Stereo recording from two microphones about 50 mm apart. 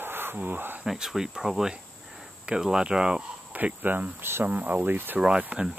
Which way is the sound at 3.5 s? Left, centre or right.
Right.